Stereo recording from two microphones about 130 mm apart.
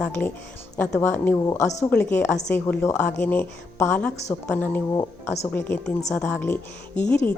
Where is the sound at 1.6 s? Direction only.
60° left (ahead or behind).